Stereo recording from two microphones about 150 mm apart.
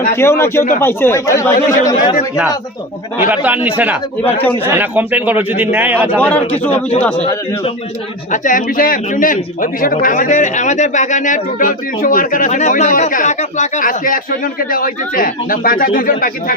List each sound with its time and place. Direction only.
0.2 s speech: 15° left (ahead or behind)
3.2 s a man's voice: 10° right (ahead or behind)
4.2 s speech: 10° left (ahead or behind)
4.6 s a man's voice: 15° right (ahead or behind)
6.1 s speech: 10° left (ahead or behind)
8.3 s a man's voice: 60° left (ahead or behind)